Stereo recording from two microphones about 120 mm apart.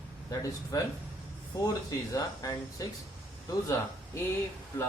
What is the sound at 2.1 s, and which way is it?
Speech, 30° left (ahead or behind).